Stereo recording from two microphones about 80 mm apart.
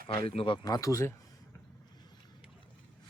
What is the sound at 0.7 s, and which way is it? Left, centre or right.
Speech, left.